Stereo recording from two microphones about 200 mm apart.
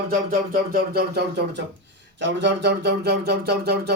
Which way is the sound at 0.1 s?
45° right (ahead or behind).